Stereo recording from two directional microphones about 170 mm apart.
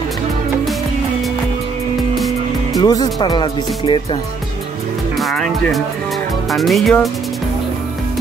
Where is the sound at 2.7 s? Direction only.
20° left (ahead or behind).